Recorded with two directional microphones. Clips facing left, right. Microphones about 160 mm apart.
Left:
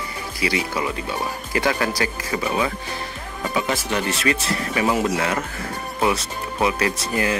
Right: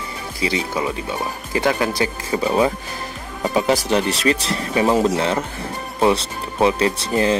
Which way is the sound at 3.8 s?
35° right (ahead or behind).